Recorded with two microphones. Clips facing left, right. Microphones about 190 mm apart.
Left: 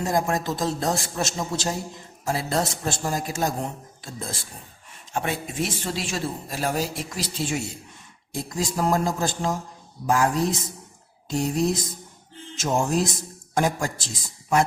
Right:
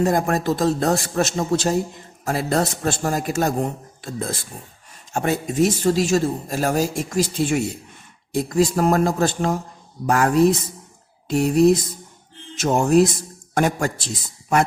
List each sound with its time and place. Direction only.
0.0 s a man's voice: 60° right (ahead or behind)
5.1 s speech: 40° right (ahead or behind)
8.3 s a man's voice: 65° right (ahead or behind)